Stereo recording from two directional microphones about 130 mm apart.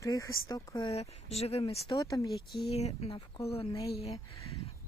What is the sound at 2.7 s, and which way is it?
Speech, 50° left (ahead or behind).